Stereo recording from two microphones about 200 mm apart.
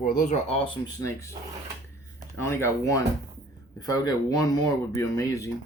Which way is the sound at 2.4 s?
15° left (ahead or behind).